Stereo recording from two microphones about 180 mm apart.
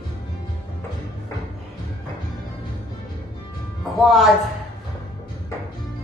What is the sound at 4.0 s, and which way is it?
Music, centre (ahead or behind).